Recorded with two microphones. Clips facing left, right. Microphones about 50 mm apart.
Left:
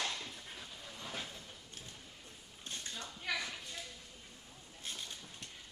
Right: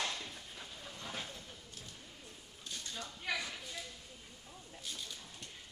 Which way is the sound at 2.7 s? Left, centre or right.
Left.